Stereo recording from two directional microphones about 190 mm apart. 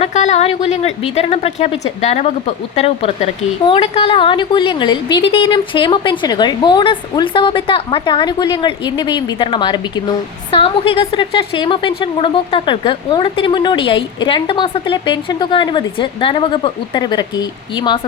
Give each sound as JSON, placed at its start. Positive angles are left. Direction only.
{"t": 0.0, "sound": "a woman's voice", "side_deg": 35}